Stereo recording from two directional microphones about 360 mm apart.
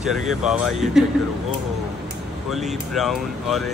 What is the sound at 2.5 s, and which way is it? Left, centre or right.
A man's voice, centre.